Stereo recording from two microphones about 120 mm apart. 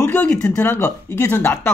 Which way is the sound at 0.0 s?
15° left (ahead or behind).